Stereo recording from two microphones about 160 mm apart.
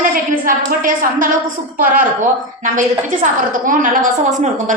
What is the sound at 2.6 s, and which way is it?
A woman's voice, 55° right (ahead or behind).